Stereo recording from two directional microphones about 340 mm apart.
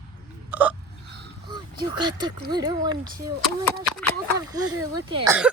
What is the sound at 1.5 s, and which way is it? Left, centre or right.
A woman's voice, centre.